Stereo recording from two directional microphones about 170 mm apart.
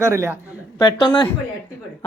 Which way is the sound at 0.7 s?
25° left (ahead or behind).